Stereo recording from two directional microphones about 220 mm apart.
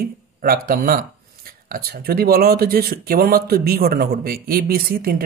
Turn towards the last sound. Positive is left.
turn(degrees=-40)  # may be behind; listen again after turning